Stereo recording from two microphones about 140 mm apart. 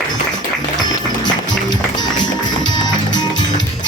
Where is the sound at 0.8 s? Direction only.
30° left (ahead or behind).